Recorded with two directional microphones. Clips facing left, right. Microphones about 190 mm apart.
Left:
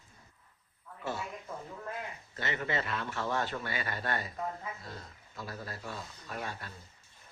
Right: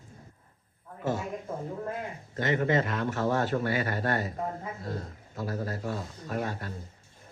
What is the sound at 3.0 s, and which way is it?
A man's voice, 40° right (ahead or behind).